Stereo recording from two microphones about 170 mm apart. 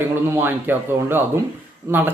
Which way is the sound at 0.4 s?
10° right (ahead or behind).